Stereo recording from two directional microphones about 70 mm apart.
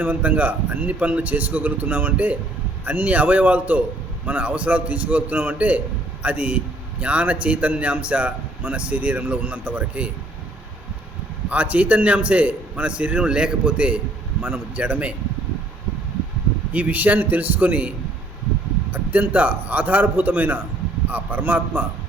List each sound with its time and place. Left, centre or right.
0.0 s speech: right
11.4 s a man's voice: right
16.7 s speech: right